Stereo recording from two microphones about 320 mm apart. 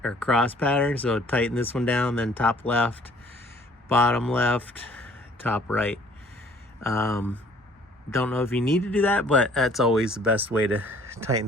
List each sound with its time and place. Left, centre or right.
0.0 s speech: centre